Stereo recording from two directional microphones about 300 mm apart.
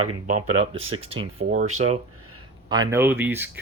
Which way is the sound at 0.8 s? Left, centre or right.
Centre.